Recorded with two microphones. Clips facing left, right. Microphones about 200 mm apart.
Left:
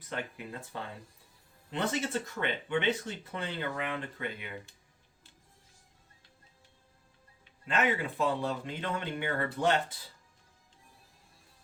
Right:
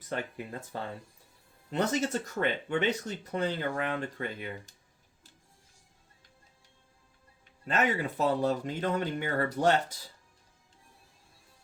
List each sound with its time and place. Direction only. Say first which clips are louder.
0.7 s speech: right 3 dB; 45° right (ahead or behind)
7.7 s speech: right 1 dB; 40° right (ahead or behind)